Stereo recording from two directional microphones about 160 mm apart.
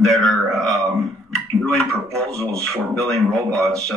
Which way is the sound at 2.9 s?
5° left (ahead or behind).